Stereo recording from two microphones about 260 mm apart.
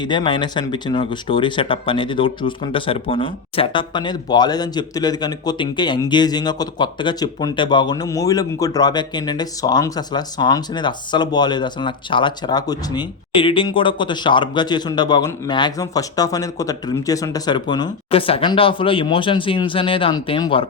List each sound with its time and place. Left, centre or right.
0.0 s speech: centre